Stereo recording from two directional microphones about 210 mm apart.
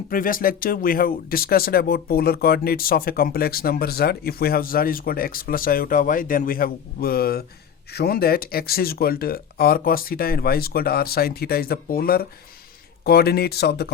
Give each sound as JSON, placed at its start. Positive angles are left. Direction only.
{"t": 0.1, "sound": "speech", "side_deg": 40}